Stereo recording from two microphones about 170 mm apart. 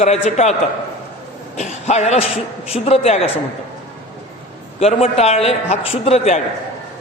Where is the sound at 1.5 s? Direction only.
40° left (ahead or behind).